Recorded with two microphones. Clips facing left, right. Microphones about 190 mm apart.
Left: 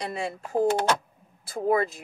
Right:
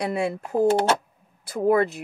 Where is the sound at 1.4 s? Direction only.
65° right (ahead or behind).